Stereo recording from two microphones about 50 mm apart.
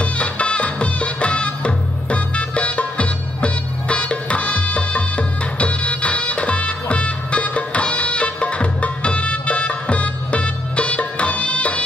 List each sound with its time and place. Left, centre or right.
0.0 s music: left